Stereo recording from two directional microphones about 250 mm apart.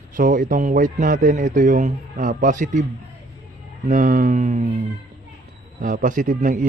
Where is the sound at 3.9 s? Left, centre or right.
Right.